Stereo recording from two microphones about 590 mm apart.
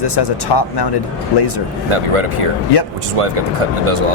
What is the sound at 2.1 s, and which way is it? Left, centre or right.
Speech, right.